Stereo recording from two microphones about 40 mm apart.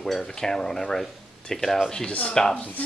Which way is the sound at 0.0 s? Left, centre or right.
Centre.